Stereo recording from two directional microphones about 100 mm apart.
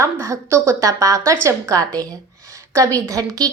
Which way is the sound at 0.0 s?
30° right (ahead or behind).